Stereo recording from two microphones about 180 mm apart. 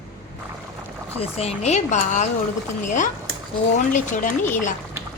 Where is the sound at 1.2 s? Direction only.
35° left (ahead or behind).